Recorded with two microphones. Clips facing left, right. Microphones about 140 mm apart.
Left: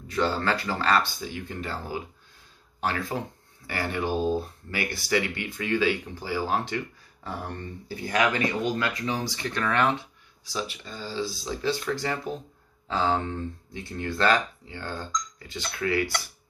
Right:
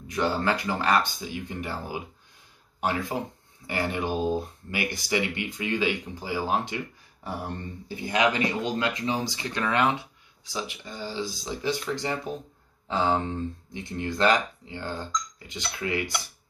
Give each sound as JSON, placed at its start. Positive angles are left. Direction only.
{"t": 0.1, "sound": "speech", "side_deg": -15}